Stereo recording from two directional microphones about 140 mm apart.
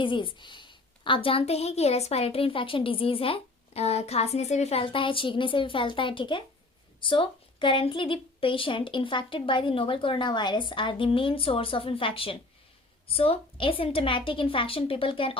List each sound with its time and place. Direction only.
0.0 s a woman's voice: 35° left (ahead or behind)